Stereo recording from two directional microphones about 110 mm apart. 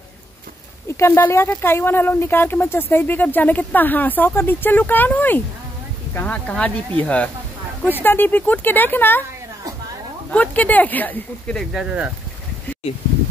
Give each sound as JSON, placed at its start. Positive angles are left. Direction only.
{"t": 0.8, "sound": "speech", "side_deg": 25}
{"t": 10.3, "sound": "speech", "side_deg": 15}
{"t": 11.7, "sound": "speech", "side_deg": -10}